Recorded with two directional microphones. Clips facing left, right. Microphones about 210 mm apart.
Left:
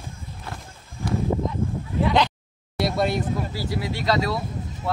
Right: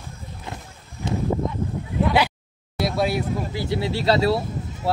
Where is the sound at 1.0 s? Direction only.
25° right (ahead or behind).